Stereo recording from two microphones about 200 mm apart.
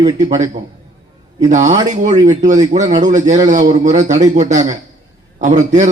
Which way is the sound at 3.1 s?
35° right (ahead or behind).